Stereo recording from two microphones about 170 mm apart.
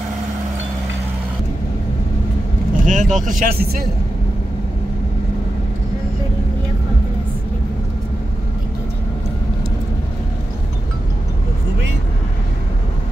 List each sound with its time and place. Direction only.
2.8 s speech: 50° right (ahead or behind)